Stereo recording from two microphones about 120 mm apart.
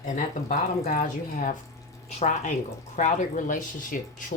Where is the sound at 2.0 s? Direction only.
75° left (ahead or behind).